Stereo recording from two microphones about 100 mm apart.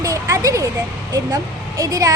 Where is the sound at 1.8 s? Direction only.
35° right (ahead or behind).